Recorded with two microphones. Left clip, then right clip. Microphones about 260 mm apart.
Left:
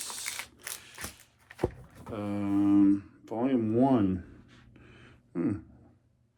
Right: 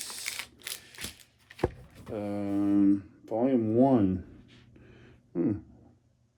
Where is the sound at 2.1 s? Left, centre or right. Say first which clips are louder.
Left 1 dB; left.